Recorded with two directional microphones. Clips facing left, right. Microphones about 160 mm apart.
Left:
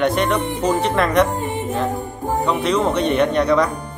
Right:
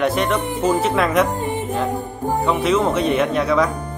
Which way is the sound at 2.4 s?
Centre (ahead or behind).